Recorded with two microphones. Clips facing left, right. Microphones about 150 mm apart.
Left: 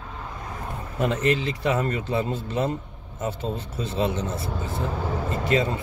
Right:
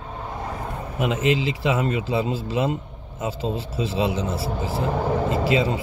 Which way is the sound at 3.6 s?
90° right.